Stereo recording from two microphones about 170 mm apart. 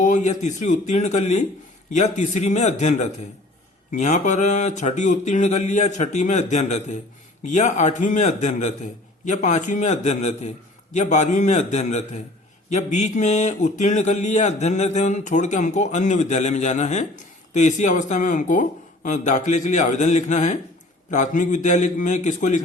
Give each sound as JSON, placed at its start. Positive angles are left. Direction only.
{"t": 0.0, "sound": "speech", "side_deg": 45}